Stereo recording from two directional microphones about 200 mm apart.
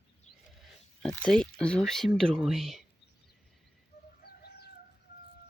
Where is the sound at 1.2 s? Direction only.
5° left (ahead or behind).